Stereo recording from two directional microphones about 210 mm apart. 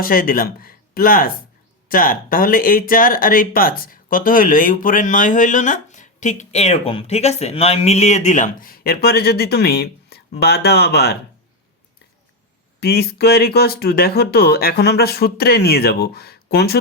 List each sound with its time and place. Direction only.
0.0 s speech: 45° left (ahead or behind)
12.8 s speech: 50° left (ahead or behind)